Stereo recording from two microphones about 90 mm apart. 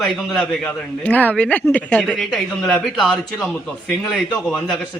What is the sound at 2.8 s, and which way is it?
A man's voice, centre (ahead or behind).